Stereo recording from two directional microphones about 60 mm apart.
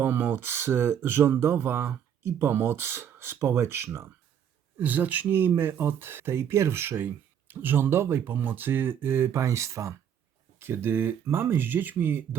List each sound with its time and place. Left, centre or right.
0.0 s speech: right
4.8 s speech: right
10.6 s speech: right